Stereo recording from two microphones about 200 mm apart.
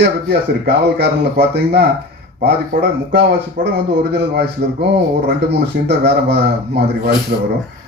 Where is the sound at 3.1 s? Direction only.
55° right (ahead or behind).